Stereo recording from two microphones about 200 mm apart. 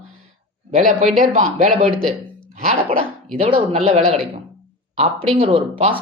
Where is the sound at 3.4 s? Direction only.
30° right (ahead or behind).